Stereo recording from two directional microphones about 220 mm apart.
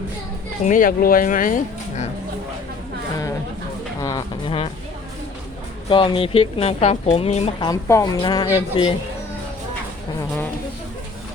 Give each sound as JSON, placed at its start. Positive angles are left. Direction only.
{"t": 0.6, "sound": "speech", "side_deg": 35}
{"t": 4.0, "sound": "speech", "side_deg": 20}
{"t": 5.9, "sound": "speech", "side_deg": 20}
{"t": 7.7, "sound": "a woman's voice", "side_deg": 15}